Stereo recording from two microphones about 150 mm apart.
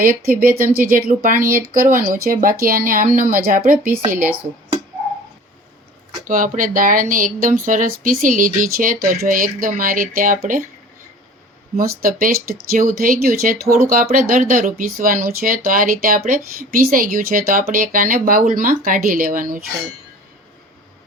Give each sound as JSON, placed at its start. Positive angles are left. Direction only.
{"t": 0.0, "sound": "speech", "side_deg": -75}
{"t": 6.2, "sound": "speech", "side_deg": -60}
{"t": 11.8, "sound": "speech", "side_deg": -75}